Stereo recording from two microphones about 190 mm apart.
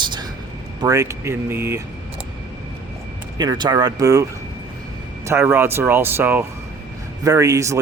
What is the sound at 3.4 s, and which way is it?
Speech, 25° right (ahead or behind).